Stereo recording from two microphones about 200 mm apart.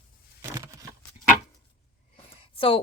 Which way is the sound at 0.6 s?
15° right (ahead or behind).